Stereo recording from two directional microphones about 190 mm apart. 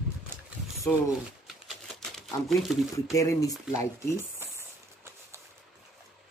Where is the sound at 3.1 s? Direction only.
15° left (ahead or behind).